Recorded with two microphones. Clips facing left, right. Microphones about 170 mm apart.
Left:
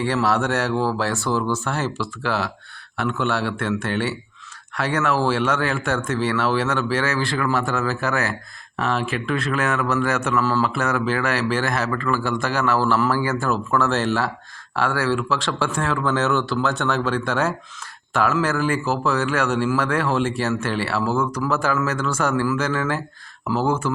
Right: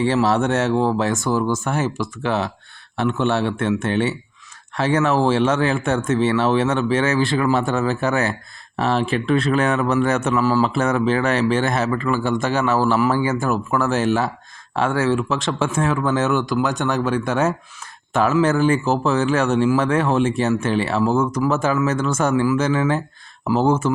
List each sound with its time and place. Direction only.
0.0 s speech: 25° right (ahead or behind)